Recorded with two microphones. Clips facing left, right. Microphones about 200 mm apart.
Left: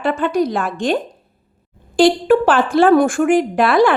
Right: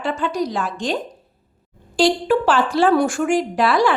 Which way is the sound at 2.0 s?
55° left (ahead or behind).